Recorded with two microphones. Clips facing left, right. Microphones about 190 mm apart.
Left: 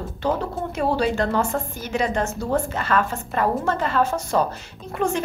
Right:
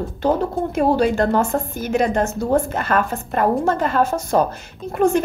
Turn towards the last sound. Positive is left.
turn(degrees=-45)  # may be behind; listen again after turning